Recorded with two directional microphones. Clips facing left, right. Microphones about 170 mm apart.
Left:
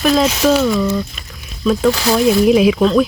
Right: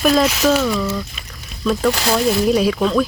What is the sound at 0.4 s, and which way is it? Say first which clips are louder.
Speech: left 3 dB; 5° left (ahead or behind).